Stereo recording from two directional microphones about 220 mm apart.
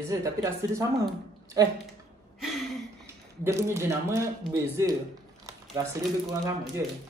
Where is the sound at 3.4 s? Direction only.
10° right (ahead or behind).